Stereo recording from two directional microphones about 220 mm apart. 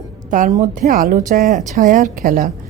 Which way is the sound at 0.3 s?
35° right (ahead or behind).